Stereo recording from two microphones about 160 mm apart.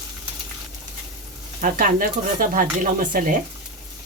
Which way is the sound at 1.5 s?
60° right (ahead or behind).